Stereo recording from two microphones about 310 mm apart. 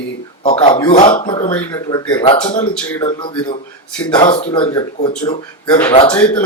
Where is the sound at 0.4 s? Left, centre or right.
Centre.